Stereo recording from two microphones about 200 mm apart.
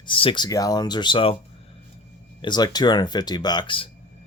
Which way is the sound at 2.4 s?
20° left (ahead or behind).